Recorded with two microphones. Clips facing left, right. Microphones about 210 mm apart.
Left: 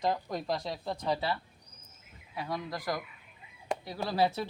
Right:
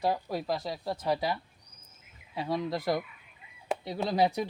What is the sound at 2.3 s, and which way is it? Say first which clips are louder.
Speech: right 5 dB; 25° right (ahead or behind).